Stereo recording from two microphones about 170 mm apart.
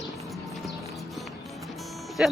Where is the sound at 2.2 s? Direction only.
5° right (ahead or behind).